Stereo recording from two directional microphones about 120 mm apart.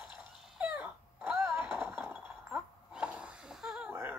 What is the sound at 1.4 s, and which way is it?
Skateboard, 20° right (ahead or behind).